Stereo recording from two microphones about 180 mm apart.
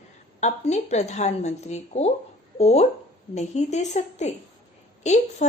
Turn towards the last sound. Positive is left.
turn(degrees=40)  # may be behind; listen again after turning